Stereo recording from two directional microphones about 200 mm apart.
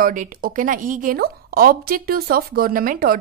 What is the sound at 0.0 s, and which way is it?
A woman's voice, 45° right (ahead or behind).